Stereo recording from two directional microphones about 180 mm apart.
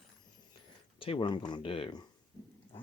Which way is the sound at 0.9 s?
30° left (ahead or behind).